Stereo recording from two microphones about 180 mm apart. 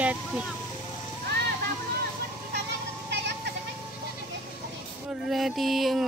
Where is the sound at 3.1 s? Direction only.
70° right (ahead or behind).